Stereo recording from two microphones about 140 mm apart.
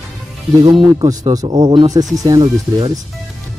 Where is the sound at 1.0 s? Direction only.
25° right (ahead or behind).